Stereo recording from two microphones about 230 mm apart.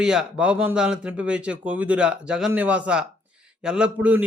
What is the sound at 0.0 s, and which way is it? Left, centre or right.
Speech, centre.